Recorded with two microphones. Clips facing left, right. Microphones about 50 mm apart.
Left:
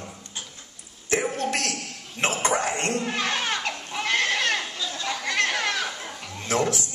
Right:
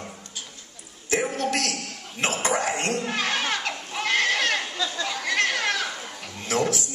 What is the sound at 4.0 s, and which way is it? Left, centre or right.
Goat, left.